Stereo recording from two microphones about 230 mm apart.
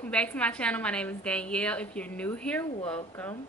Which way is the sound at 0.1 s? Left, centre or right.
Centre.